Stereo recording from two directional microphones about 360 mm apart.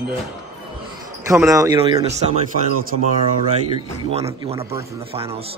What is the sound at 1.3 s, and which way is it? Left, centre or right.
Speech, centre.